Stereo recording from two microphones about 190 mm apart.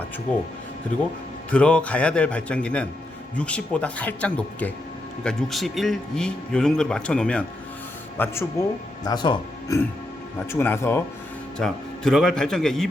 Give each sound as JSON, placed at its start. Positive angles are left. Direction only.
{"t": 0.3, "sound": "speech", "side_deg": 5}
{"t": 1.5, "sound": "speech", "side_deg": 5}
{"t": 9.0, "sound": "speech", "side_deg": 25}
{"t": 10.5, "sound": "speech", "side_deg": 15}
{"t": 11.6, "sound": "speech", "side_deg": 0}